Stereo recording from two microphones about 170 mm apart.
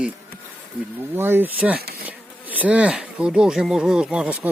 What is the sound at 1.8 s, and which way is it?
Insect, 65° right (ahead or behind).